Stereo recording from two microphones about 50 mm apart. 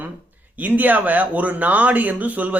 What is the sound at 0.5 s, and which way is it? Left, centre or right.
A man's voice, right.